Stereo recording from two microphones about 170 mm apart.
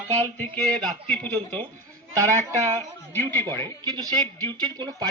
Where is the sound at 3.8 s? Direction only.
25° right (ahead or behind).